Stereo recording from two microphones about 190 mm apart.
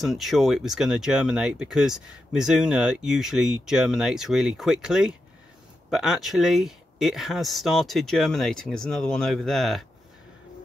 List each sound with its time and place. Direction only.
0.0 s speech: centre (ahead or behind)